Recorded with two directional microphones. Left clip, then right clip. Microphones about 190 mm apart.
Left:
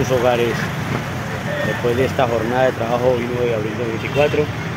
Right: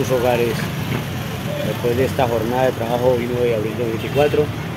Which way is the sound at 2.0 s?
Centre (ahead or behind).